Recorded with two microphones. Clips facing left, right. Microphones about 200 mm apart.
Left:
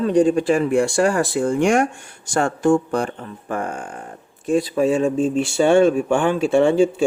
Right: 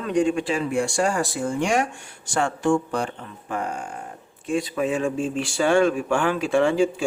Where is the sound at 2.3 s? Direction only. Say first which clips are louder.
Left 4 dB; 40° left (ahead or behind).